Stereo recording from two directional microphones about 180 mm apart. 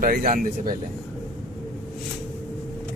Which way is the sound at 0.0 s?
55° right (ahead or behind).